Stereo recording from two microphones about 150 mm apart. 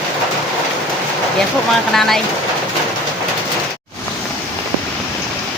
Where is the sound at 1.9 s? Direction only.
Centre (ahead or behind).